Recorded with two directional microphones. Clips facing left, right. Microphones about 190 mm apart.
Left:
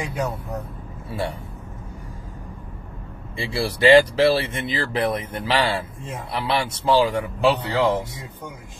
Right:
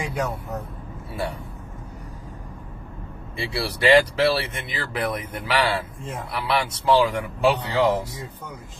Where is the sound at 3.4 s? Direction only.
25° left (ahead or behind).